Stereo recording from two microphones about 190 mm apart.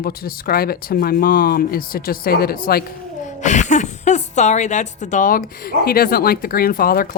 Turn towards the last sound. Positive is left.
turn(degrees=50)  # may be behind; listen again after turning